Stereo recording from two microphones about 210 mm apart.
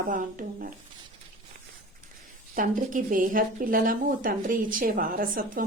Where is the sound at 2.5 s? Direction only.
40° right (ahead or behind).